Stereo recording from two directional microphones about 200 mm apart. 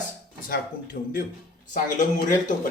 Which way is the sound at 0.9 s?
45° left (ahead or behind).